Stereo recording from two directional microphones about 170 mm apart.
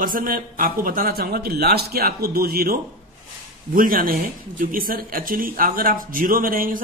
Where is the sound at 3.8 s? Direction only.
55° right (ahead or behind).